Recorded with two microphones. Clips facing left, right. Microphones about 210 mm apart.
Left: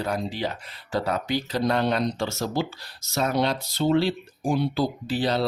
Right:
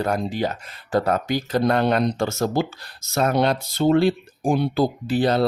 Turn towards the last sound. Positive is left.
turn(degrees=-50)  # may be behind; listen again after turning